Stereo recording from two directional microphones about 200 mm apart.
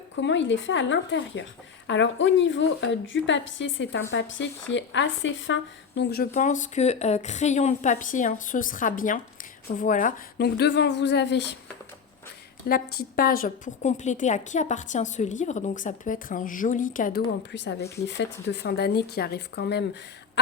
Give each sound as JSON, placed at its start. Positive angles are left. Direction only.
{"t": 0.2, "sound": "a woman's voice", "side_deg": 65}
{"t": 6.0, "sound": "a woman's voice", "side_deg": 50}
{"t": 12.6, "sound": "a woman's voice", "side_deg": 50}
{"t": 17.2, "sound": "a woman's voice", "side_deg": 60}